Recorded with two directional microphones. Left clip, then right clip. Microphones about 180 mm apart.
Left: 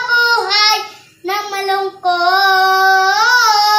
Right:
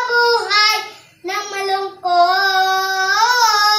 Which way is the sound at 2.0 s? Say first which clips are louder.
Left 2 dB; 10° right (ahead or behind).